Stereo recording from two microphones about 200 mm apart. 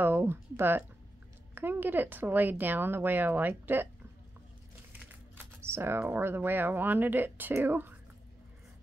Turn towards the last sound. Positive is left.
turn(degrees=-10)  # may be behind; listen again after turning